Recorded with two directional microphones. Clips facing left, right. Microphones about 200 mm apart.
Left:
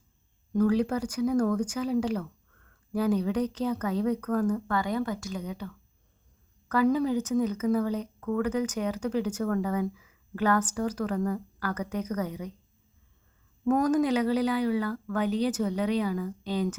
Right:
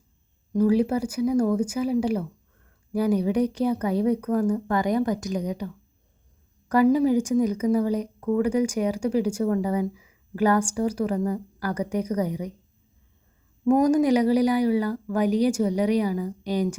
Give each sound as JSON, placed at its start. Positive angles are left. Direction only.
{"t": 0.6, "sound": "speech", "side_deg": -10}
{"t": 6.9, "sound": "speech", "side_deg": -10}
{"t": 13.7, "sound": "speech", "side_deg": -10}